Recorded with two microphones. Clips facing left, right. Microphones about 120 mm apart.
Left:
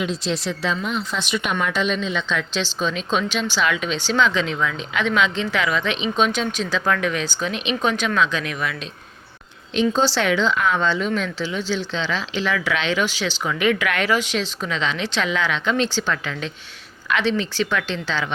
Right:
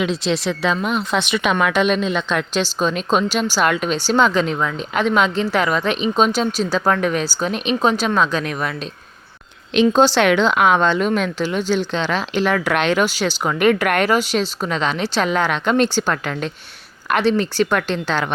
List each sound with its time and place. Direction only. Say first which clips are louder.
0.0 s speech: right 4 dB; 75° right (ahead or behind); by 8.7 s 40° right (ahead or behind)
9.7 s speech: right 5 dB; 65° right (ahead or behind)